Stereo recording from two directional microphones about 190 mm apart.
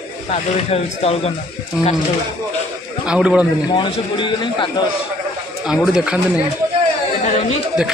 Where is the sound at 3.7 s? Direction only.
25° left (ahead or behind).